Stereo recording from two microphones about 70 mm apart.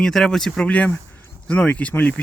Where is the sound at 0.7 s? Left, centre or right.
Centre.